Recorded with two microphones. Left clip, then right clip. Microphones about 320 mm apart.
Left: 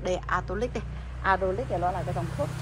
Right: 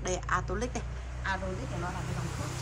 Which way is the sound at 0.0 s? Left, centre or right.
Centre.